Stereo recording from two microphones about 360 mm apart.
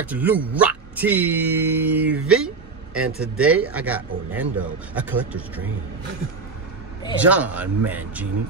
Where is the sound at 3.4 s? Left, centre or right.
Right.